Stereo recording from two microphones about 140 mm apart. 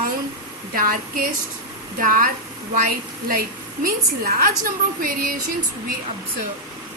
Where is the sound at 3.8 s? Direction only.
90° right.